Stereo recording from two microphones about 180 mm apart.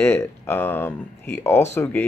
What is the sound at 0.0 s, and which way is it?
Speech, 10° left (ahead or behind).